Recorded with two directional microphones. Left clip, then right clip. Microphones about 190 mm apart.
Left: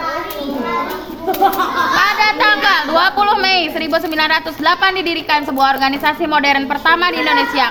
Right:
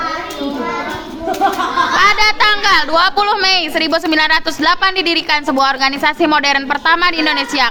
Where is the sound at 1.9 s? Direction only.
30° right (ahead or behind).